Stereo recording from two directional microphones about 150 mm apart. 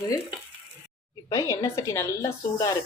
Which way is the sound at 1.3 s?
20° left (ahead or behind).